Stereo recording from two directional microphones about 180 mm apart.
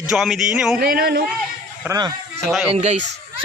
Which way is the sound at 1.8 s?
20° right (ahead or behind).